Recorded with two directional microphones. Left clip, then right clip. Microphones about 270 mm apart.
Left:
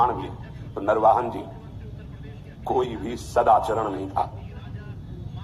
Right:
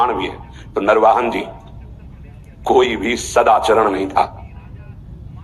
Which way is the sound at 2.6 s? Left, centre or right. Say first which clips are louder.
Right 11 dB; right.